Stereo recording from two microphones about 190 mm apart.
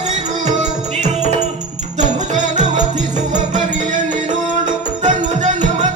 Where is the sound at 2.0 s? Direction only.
40° right (ahead or behind).